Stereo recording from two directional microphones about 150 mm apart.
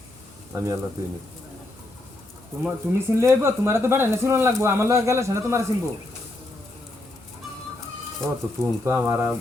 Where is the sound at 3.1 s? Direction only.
20° right (ahead or behind).